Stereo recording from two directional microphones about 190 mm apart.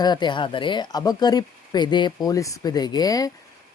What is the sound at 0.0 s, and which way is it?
Speech, 25° left (ahead or behind).